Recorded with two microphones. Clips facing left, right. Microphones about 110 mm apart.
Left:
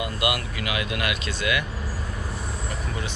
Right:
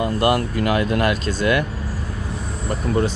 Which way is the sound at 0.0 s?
40° right (ahead or behind).